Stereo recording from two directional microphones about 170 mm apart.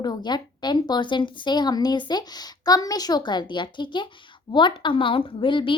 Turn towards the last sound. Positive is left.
turn(degrees=30)  # may be behind; listen again after turning